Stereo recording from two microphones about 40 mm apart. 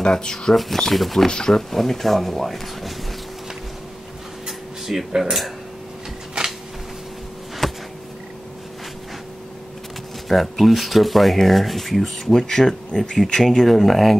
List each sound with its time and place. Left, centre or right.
0.0 s speech: centre
1.2 s speech: centre
1.7 s speech: centre
4.5 s dishes: centre
6.4 s a sound: centre
7.6 s a sound: centre
10.2 s speech: centre
12.3 s speech: centre